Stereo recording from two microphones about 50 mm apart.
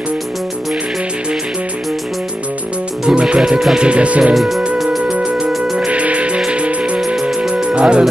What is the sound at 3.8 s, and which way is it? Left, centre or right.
Speech, right.